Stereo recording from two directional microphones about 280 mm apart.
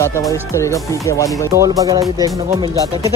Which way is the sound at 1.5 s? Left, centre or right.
Centre.